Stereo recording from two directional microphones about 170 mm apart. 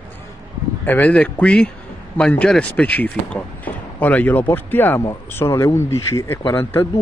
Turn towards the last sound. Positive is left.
turn(degrees=15)  # may be behind; listen again after turning